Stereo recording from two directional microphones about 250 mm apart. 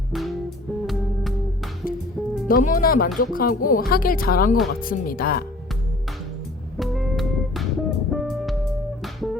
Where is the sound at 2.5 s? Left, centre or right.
Left.